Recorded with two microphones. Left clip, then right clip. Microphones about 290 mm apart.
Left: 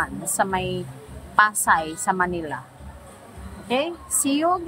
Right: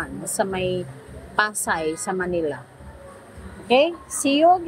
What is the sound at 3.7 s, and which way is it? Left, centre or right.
Speech, centre.